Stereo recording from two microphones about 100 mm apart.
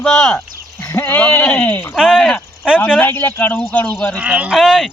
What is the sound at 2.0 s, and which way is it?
Speech, 5° left (ahead or behind).